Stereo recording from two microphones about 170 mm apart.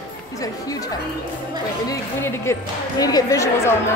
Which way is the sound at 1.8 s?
15° left (ahead or behind).